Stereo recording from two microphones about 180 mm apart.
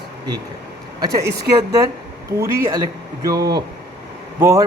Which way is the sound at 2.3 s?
15° right (ahead or behind).